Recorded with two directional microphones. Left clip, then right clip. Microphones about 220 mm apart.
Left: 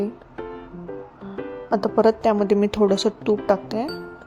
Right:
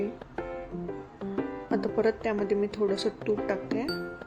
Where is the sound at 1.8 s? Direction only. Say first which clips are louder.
Left 10 dB; 30° left (ahead or behind).